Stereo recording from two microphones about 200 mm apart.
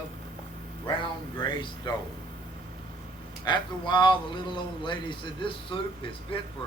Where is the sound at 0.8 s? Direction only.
20° left (ahead or behind).